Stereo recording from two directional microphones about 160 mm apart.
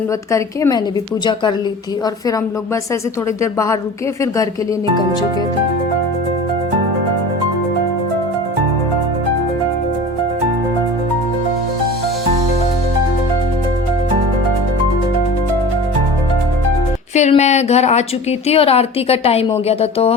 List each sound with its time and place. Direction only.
0.3 s a woman's voice: 20° left (ahead or behind)
3.4 s a woman's voice: 20° left (ahead or behind)
17.2 s a woman's voice: 45° left (ahead or behind)